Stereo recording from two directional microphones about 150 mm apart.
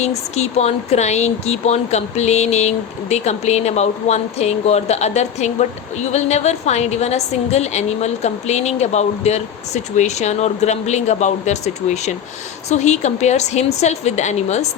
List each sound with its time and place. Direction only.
0.0 s speech: 45° left (ahead or behind)